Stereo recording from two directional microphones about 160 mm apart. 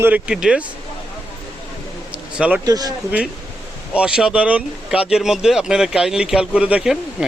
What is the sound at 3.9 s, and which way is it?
Speech, 5° right (ahead or behind).